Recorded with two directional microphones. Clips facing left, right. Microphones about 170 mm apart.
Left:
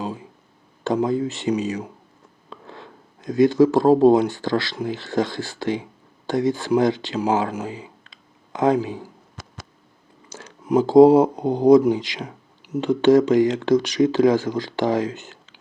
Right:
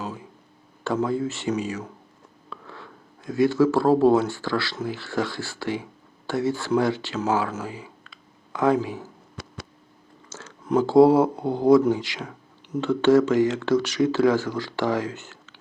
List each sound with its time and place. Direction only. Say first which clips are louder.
0.0 s a sound: left 4 dB; 20° left (ahead or behind)
0.9 s speech: left 3 dB; 20° left (ahead or behind)
10.2 s speech: left 3 dB; 15° left (ahead or behind)